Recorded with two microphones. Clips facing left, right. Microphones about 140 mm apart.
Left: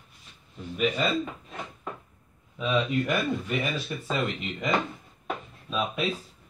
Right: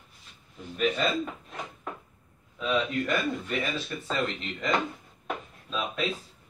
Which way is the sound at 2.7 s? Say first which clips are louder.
Left 2 dB; 10° left (ahead or behind).